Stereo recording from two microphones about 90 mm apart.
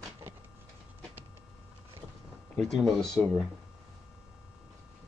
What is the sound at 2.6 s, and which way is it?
Speech, 5° left (ahead or behind).